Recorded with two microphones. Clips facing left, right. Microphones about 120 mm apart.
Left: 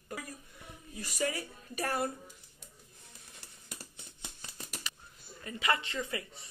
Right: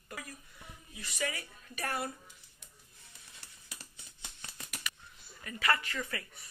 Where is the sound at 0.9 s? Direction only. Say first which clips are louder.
Left 4 dB; 45° left (ahead or behind).